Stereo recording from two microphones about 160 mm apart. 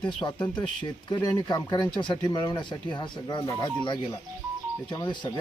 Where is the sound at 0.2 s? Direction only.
25° left (ahead or behind).